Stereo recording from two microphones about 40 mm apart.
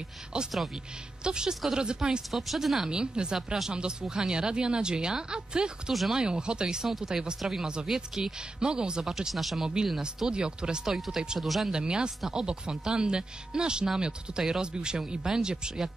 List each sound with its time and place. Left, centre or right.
1.2 s speech: centre
2.3 s speech: centre
2.9 s speech: right
9.0 s speech: centre
10.1 s speech: centre
11.3 s speech: centre
11.7 s speech: right